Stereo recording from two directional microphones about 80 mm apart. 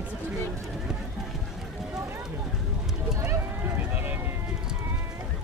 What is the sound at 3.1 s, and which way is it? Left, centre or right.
Run, right.